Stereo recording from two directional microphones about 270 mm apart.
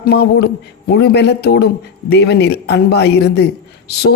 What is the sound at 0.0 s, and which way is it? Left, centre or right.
Speech, left.